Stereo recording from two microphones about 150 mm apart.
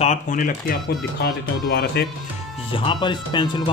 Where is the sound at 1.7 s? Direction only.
90° left.